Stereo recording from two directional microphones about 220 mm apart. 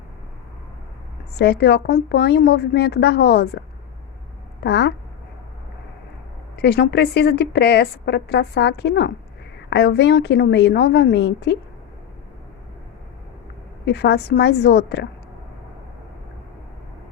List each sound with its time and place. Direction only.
1.4 s a woman's voice: 50° left (ahead or behind)
4.6 s a woman's voice: 50° left (ahead or behind)
6.6 s a woman's voice: 50° left (ahead or behind)
13.8 s a woman's voice: 50° left (ahead or behind)